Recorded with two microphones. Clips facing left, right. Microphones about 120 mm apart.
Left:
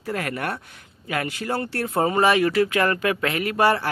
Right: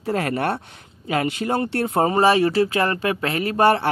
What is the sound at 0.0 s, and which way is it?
Speech, 30° right (ahead or behind).